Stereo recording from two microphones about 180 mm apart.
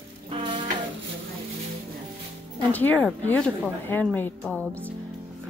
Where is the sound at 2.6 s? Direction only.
10° left (ahead or behind).